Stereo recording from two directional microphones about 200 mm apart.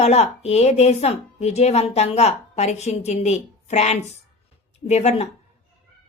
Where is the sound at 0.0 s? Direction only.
35° left (ahead or behind).